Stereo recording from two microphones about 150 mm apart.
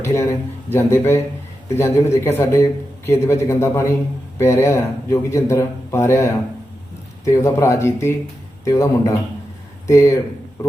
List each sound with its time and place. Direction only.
0.0 s speech: 20° left (ahead or behind)